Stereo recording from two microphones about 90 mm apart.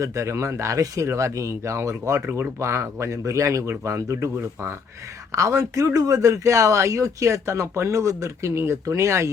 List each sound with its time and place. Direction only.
0.0 s speech: 35° right (ahead or behind)